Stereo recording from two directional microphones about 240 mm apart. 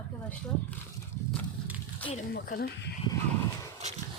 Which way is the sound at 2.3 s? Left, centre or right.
Left.